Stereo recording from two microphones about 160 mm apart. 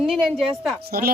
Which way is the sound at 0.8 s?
70° right (ahead or behind).